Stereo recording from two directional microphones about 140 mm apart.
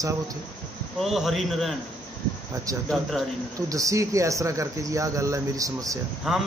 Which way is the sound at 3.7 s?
25° right (ahead or behind).